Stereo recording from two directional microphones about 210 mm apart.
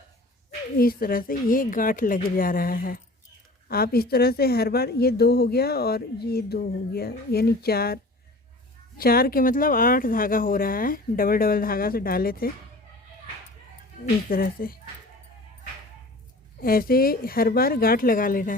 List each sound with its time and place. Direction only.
0.8 s speech: 45° left (ahead or behind)
9.0 s speech: 45° left (ahead or behind)
14.0 s speech: 45° left (ahead or behind)
16.6 s speech: 45° left (ahead or behind)